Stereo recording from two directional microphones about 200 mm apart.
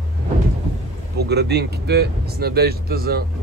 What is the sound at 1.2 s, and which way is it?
Speech, 55° right (ahead or behind).